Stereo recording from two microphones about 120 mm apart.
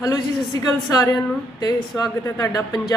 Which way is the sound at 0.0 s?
25° left (ahead or behind).